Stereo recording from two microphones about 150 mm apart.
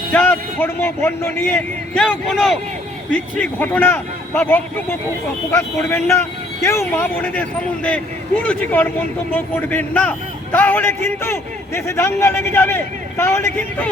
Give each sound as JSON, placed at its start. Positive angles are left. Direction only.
{"t": 0.1, "sound": "a man's voice", "side_deg": 10}
{"t": 8.4, "sound": "a man's voice", "side_deg": 10}